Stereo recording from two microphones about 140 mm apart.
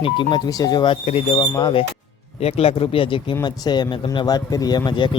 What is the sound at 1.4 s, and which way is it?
Speech, 30° left (ahead or behind).